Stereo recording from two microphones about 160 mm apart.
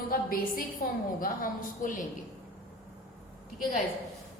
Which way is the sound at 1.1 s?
60° left (ahead or behind).